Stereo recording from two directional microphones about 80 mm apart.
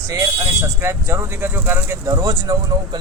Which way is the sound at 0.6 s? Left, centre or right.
Right.